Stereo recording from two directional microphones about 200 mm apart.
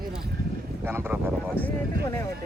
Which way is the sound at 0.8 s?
10° right (ahead or behind).